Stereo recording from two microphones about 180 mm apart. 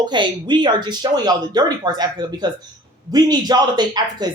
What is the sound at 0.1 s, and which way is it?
A woman's voice, 25° right (ahead or behind).